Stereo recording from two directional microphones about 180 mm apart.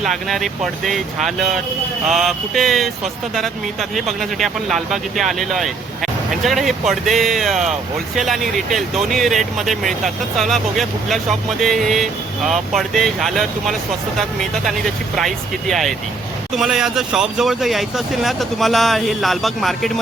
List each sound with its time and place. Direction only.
0.0 s speech: centre (ahead or behind)